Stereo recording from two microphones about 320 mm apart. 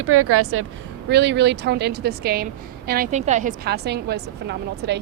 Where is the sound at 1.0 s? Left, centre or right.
Right.